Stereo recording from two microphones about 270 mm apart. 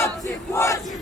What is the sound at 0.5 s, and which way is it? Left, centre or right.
Battle cry, centre.